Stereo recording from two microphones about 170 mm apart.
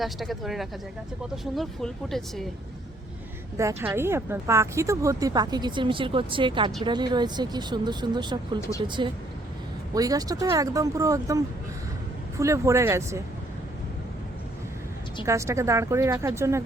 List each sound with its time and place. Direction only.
0.0 s speech: centre (ahead or behind)
3.6 s a woman's voice: 15° right (ahead or behind)
15.2 s speech: 15° right (ahead or behind)